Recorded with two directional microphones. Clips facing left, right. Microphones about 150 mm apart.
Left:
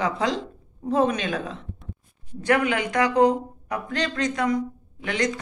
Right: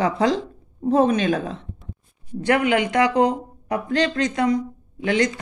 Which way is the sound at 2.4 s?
25° right (ahead or behind).